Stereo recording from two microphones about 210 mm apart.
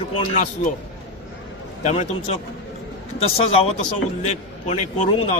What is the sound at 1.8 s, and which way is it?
Speech, 30° left (ahead or behind).